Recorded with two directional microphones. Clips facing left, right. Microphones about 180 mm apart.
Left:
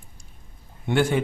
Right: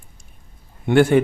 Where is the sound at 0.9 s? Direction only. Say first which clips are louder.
Right 7 dB; 60° right (ahead or behind).